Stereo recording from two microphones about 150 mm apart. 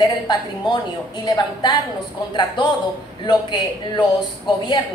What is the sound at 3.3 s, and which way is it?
Speech, 30° left (ahead or behind).